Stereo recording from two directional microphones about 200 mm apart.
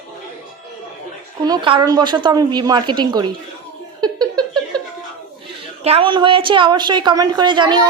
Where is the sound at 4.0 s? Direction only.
20° right (ahead or behind).